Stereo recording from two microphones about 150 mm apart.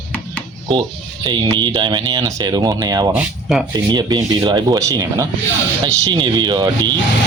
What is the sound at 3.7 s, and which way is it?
Speech, 30° right (ahead or behind).